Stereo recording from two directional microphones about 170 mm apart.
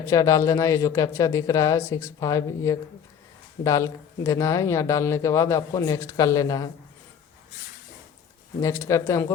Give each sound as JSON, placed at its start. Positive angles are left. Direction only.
{"t": 0.0, "sound": "speech", "side_deg": 20}
{"t": 8.6, "sound": "speech", "side_deg": 15}